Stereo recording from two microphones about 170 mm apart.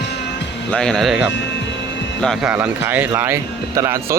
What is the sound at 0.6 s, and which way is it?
Speech, 5° left (ahead or behind).